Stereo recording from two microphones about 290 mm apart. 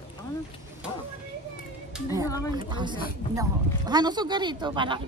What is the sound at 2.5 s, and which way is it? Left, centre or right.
Speech, centre.